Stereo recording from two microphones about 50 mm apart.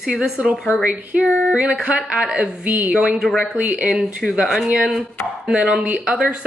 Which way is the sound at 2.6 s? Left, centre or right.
Right.